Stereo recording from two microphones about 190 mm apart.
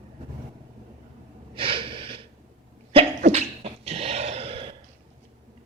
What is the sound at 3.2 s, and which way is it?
Sneeze, 35° right (ahead or behind).